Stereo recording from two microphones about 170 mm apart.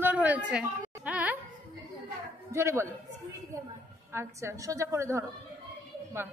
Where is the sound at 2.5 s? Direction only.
15° right (ahead or behind).